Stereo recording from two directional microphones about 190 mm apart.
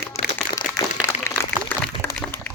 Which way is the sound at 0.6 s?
40° left (ahead or behind).